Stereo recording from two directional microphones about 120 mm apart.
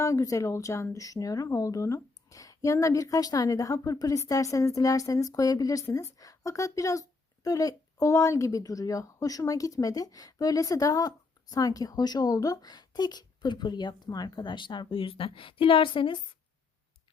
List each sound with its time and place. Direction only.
0.0 s speech: 25° left (ahead or behind); by 16.1 s 45° left (ahead or behind)